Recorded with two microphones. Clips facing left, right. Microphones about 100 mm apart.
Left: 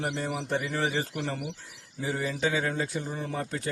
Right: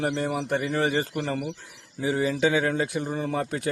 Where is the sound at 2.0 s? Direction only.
70° right (ahead or behind).